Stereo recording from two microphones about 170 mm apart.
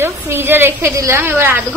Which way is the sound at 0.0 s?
15° right (ahead or behind).